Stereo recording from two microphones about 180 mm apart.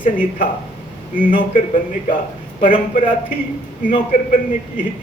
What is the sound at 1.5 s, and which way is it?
A man's voice, 50° left (ahead or behind).